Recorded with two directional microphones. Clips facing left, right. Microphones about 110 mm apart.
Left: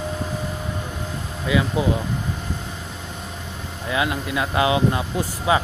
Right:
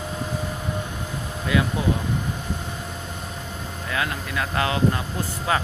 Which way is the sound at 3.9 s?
15° left (ahead or behind).